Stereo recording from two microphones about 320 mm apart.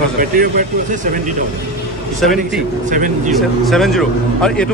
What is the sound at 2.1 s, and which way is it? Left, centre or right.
Speech, centre.